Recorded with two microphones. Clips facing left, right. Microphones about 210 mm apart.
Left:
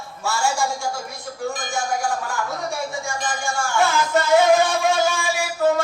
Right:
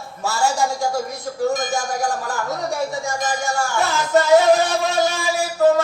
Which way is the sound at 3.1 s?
40° right (ahead or behind).